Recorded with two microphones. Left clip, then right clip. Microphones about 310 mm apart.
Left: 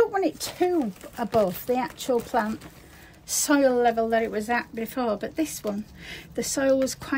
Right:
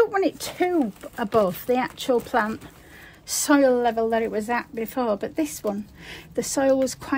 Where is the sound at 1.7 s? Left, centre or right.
Right.